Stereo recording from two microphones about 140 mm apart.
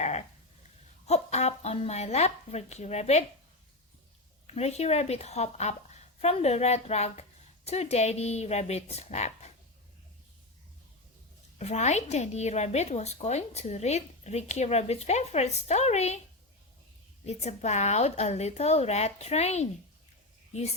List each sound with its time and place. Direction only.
0.0 s sheep: 50° left (ahead or behind)
1.0 s a woman's voice: 50° left (ahead or behind)
4.4 s a woman's voice: 50° left (ahead or behind)
11.5 s a woman's voice: 55° left (ahead or behind)
17.2 s a woman's voice: 55° left (ahead or behind)